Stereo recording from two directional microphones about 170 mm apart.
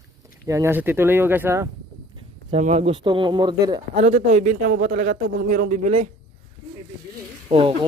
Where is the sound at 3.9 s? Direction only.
40° right (ahead or behind).